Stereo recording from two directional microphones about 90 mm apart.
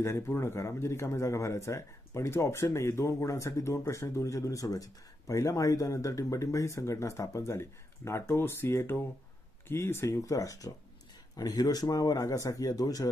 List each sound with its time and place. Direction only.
0.0 s speech: 30° left (ahead or behind)